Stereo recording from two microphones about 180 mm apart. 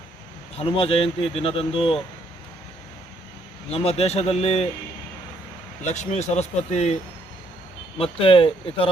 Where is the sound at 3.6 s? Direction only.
35° left (ahead or behind).